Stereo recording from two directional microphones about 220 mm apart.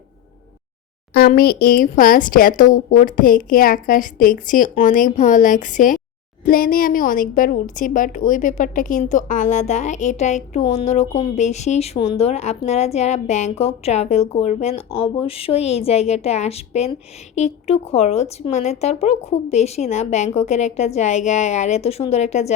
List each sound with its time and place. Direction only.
1.1 s a woman's voice: 45° left (ahead or behind)